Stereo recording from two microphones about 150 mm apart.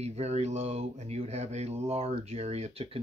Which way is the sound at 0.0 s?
45° right (ahead or behind).